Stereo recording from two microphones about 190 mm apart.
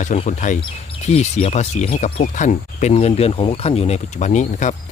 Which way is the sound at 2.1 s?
45° left (ahead or behind).